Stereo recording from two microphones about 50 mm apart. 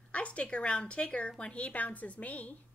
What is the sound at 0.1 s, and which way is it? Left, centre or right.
A woman's voice, left.